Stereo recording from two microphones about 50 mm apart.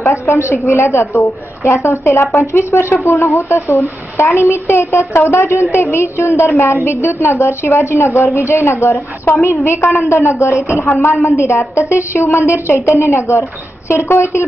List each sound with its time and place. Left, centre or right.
0.1 s a woman's voice: left
3.0 s a woman's voice: left
9.3 s a woman's voice: left
9.7 s a woman's voice: left